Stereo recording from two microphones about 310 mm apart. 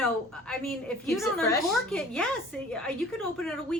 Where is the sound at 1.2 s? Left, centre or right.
Centre.